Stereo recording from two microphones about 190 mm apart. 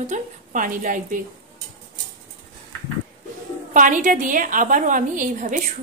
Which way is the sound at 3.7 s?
45° right (ahead or behind).